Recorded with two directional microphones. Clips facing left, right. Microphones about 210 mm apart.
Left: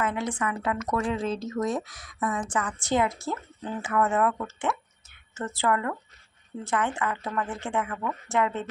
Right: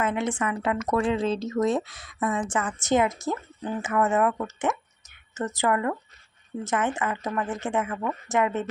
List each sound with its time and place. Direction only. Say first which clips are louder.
0.0 s a woman's voice: right 2 dB; 25° right (ahead or behind)